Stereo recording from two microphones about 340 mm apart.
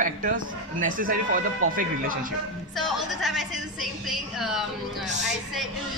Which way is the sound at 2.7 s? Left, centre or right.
Centre.